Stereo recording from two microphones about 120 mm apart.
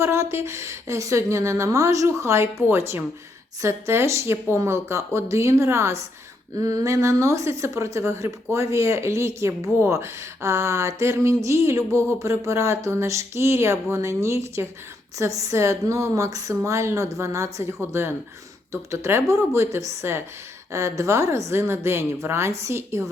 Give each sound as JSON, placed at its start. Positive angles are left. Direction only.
{"t": 0.0, "sound": "a woman's voice", "side_deg": -25}